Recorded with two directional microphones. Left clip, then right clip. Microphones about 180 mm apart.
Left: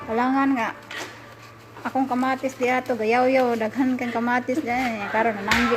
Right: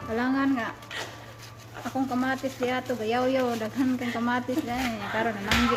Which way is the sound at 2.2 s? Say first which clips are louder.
Left 5 dB; 20° left (ahead or behind).